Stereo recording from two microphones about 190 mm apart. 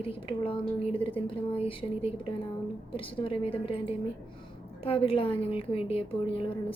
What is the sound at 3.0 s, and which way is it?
A woman's voice, 30° left (ahead or behind).